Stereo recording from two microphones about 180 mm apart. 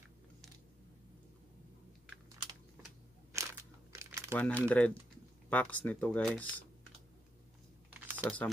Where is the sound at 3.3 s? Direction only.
15° right (ahead or behind).